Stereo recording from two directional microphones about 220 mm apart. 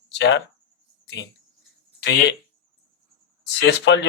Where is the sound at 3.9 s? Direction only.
55° left (ahead or behind).